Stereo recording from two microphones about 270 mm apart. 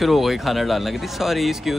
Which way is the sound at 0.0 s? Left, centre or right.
Centre.